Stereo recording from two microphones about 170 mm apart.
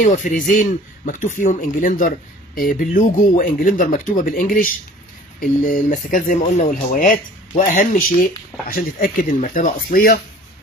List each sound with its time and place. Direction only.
0.0 s speech: 50° left (ahead or behind)